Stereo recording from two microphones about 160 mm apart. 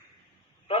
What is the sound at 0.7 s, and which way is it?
Honk, 35° left (ahead or behind).